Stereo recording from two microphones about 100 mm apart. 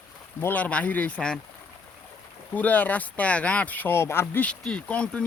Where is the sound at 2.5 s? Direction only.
15° left (ahead or behind).